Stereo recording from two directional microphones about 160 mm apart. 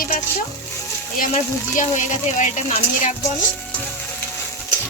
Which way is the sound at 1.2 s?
55° left (ahead or behind).